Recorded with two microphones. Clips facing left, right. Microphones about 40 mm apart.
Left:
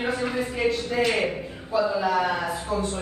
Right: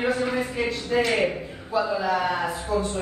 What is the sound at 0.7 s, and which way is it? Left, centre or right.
Speech, right.